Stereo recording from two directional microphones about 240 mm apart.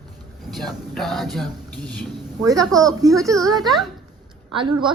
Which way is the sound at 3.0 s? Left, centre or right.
Centre.